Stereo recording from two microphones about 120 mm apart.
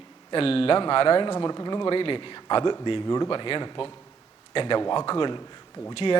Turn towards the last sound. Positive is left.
turn(degrees=40)  # may be behind; listen again after turning